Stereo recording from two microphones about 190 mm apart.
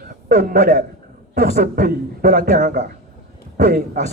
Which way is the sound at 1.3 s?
50° right (ahead or behind).